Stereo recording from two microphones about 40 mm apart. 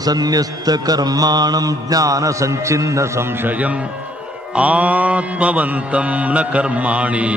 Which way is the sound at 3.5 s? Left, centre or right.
Right.